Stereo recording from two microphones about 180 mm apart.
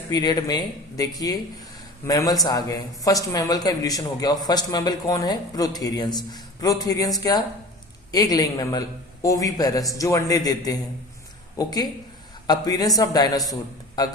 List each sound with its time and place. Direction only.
0.1 s a man's voice: 20° left (ahead or behind)